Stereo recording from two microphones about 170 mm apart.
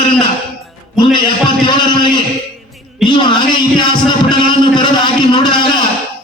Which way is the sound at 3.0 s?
25° left (ahead or behind).